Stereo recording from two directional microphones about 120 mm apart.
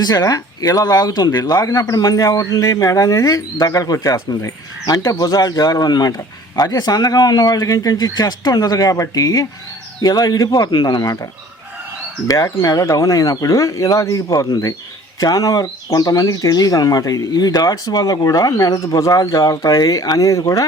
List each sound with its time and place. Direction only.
0.0 s speech: 35° left (ahead or behind)
12.3 s speech: 30° left (ahead or behind)